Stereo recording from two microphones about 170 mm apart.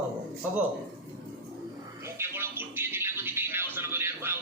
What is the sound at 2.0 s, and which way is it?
Music, 15° right (ahead or behind).